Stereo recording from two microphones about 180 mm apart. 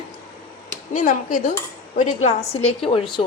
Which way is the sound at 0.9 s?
45° left (ahead or behind).